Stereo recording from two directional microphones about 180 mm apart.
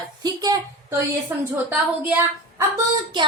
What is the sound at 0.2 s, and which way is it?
A woman's voice, 20° right (ahead or behind).